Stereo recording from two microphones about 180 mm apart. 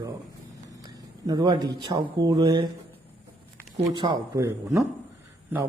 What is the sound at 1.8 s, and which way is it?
Speech, 25° right (ahead or behind).